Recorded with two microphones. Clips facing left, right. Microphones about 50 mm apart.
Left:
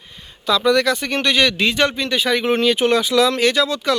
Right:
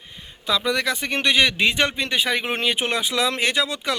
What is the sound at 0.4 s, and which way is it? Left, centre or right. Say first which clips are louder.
Speech: left 6 dB; centre.